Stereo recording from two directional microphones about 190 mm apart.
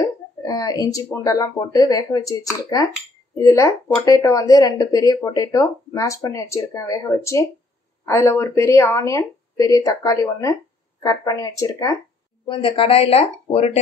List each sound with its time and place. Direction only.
0.0 s speech: 20° left (ahead or behind)